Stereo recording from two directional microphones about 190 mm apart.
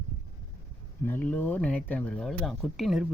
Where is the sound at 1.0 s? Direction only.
10° left (ahead or behind).